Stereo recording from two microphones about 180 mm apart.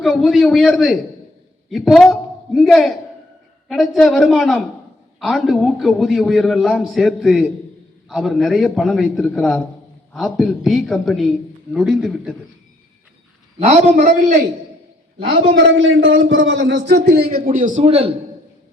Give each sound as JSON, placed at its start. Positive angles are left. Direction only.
{"t": 0.0, "sound": "a man's voice", "side_deg": 0}
{"t": 13.7, "sound": "a man's voice", "side_deg": -40}
{"t": 15.2, "sound": "a man's voice", "side_deg": -70}
{"t": 17.8, "sound": "a man's voice", "side_deg": -35}